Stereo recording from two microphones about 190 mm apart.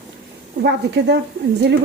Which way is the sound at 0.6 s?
65° right (ahead or behind).